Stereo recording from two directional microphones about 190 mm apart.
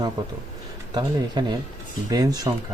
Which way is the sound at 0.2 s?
20° right (ahead or behind).